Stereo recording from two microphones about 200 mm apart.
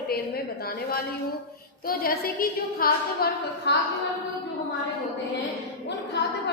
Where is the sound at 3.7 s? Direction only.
55° left (ahead or behind).